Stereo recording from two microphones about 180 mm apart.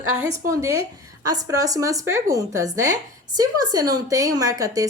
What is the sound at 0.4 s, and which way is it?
A woman's voice, 20° right (ahead or behind).